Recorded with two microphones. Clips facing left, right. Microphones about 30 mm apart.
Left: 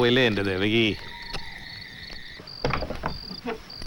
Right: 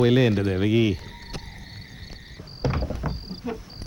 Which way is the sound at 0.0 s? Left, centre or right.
Left.